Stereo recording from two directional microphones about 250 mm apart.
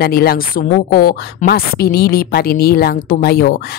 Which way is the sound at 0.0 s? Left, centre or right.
Left.